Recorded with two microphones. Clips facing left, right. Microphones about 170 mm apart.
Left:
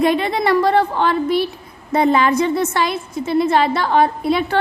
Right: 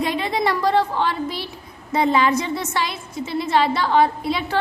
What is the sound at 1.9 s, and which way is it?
A woman's voice, 55° left (ahead or behind).